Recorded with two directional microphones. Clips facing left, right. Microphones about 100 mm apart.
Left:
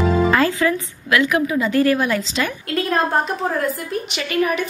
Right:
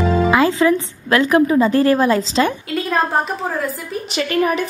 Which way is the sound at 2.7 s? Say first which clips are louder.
Left 1 dB; centre (ahead or behind).